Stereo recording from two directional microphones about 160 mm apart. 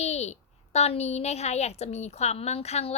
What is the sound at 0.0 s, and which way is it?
A woman's voice, 45° left (ahead or behind).